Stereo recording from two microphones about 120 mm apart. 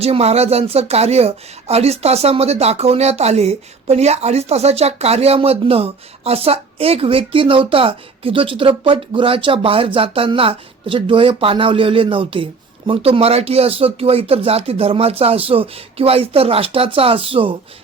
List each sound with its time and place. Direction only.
0.0 s speech: 60° right (ahead or behind)